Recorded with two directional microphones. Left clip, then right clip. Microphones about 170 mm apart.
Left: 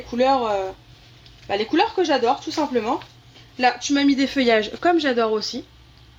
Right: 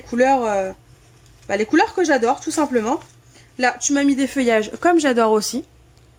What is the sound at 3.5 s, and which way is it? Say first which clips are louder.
Speech: right 1 dB; 45° right (ahead or behind).